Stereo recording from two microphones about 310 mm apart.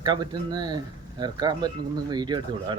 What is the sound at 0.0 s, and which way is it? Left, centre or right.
Speech, centre.